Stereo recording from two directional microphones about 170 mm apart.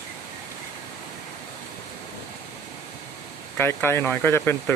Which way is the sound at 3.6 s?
15° left (ahead or behind).